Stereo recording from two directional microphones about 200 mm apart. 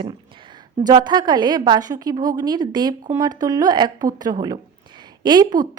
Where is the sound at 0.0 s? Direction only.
25° right (ahead or behind).